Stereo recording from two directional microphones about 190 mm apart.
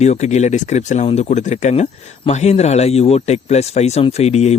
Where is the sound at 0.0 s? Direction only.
35° left (ahead or behind).